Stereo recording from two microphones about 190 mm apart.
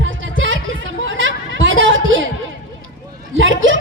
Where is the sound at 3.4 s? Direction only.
80° right.